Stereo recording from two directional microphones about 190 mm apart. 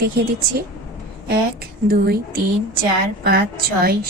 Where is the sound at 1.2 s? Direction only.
55° right (ahead or behind).